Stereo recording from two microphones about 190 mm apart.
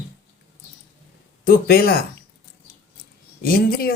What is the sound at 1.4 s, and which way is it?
Speech, 50° left (ahead or behind).